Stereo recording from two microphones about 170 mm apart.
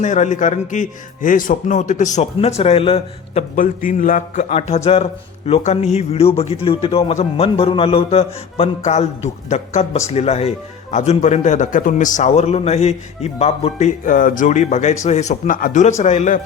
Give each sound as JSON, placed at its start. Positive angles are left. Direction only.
{"t": 0.0, "sound": "a man's voice", "side_deg": 45}
{"t": 3.5, "sound": "a man's voice", "side_deg": 55}